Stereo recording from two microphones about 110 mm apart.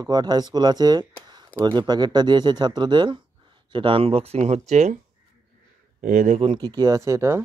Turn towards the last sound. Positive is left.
turn(degrees=-25)  # may be behind; listen again after turning